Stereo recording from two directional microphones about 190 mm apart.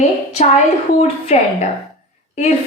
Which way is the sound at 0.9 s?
30° left (ahead or behind).